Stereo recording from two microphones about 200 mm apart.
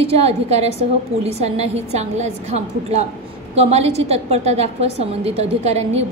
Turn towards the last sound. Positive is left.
turn(degrees=-30)  # may be behind; listen again after turning